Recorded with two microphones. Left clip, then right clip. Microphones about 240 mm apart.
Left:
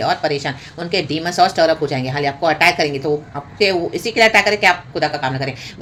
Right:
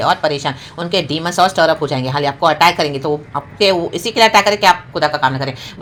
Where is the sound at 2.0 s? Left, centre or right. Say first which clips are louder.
Right 3 dB; right.